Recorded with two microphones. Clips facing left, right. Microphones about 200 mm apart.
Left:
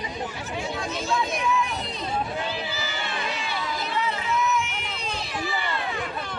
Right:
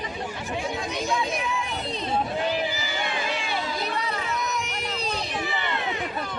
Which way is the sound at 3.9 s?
40° right (ahead or behind).